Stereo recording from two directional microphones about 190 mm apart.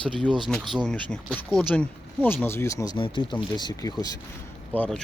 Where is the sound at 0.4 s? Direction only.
Centre (ahead or behind); by 4.1 s 20° left (ahead or behind).